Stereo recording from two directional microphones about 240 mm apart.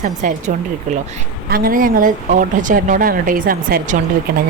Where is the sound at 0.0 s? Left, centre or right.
Right.